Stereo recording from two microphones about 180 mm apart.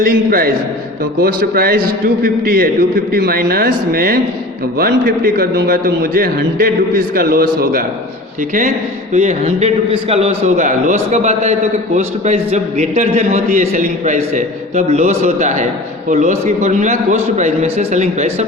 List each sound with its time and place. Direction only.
0.0 s a man's voice: 55° right (ahead or behind)
9.1 s a man's voice: 40° right (ahead or behind)